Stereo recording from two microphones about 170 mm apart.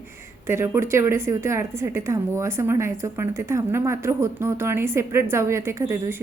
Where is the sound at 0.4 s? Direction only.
15° right (ahead or behind).